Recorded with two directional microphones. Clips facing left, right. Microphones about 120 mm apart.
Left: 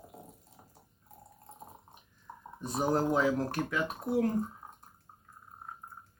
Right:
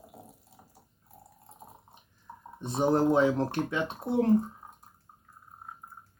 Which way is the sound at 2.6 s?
25° right (ahead or behind).